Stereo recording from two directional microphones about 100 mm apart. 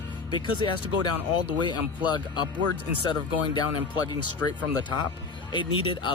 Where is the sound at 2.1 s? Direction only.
50° left (ahead or behind).